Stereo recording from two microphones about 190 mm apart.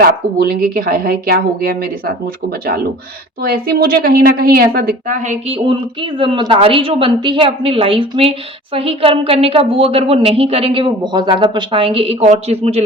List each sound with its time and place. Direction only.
0.0 s speech: 55° right (ahead or behind)
5.6 s a woman's voice: 25° right (ahead or behind)